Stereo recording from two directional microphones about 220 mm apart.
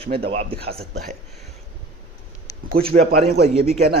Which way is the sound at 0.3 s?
25° right (ahead or behind).